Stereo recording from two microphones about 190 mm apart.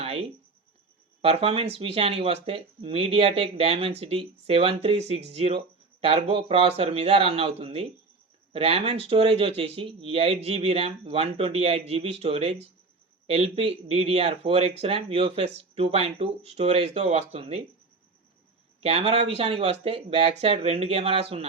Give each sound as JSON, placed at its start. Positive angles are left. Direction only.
{"t": 0.0, "sound": "a sound", "side_deg": -30}
{"t": 1.2, "sound": "speech", "side_deg": -30}
{"t": 18.8, "sound": "speech", "side_deg": -30}